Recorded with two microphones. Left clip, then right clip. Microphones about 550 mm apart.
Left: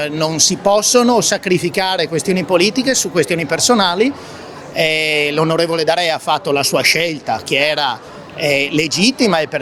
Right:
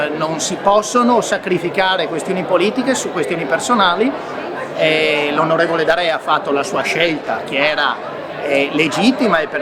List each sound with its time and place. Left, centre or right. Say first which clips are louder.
0.7 s speech: even; left